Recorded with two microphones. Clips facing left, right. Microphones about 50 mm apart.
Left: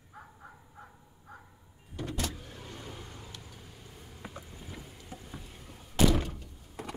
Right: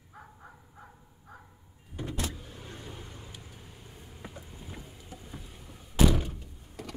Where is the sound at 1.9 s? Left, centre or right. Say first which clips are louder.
Even; right.